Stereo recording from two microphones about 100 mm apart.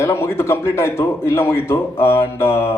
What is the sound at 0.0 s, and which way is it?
A man's voice, 30° left (ahead or behind).